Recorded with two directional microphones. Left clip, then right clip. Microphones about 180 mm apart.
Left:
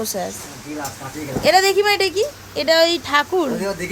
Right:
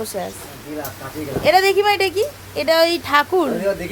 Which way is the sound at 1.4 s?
10° left (ahead or behind).